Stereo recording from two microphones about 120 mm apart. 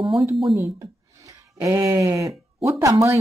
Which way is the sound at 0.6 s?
25° right (ahead or behind).